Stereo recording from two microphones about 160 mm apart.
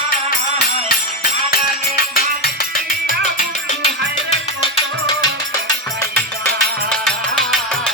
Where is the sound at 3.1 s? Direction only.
60° left (ahead or behind).